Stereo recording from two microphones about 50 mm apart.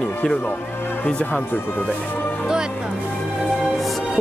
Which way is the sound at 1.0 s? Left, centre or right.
Left.